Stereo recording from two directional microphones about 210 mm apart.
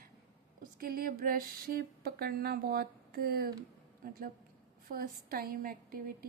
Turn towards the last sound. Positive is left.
turn(degrees=-45)  # may be behind; listen again after turning